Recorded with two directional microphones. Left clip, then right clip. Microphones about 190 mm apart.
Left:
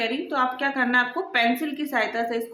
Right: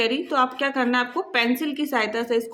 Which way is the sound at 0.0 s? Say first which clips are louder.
Right 3 dB; 30° right (ahead or behind).